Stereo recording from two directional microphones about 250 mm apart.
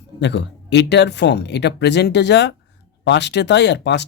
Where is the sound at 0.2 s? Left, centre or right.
Left.